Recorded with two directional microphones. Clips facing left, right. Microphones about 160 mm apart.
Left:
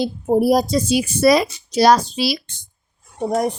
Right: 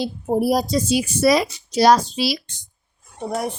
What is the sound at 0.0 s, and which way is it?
A woman's voice, 45° left (ahead or behind).